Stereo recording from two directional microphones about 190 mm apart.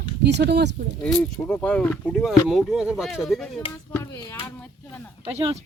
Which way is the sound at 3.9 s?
15° left (ahead or behind).